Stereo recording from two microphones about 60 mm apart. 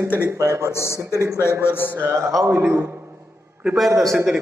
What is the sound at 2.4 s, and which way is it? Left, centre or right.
Speech, right.